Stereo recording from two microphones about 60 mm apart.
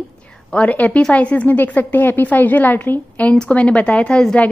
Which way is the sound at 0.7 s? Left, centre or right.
Left.